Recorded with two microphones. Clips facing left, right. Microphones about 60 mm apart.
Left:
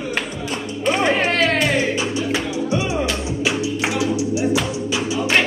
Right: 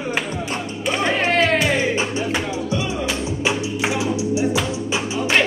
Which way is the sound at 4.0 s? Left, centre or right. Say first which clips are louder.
Left 2 dB; right.